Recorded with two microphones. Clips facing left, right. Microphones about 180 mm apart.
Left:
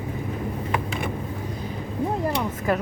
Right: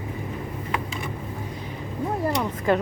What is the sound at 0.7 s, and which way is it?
Vehicle, 60° left (ahead or behind).